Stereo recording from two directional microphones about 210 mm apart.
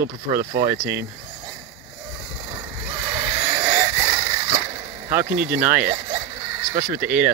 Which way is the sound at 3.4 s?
15° right (ahead or behind).